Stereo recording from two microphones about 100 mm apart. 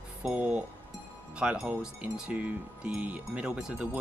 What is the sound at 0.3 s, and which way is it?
Speech, 10° right (ahead or behind).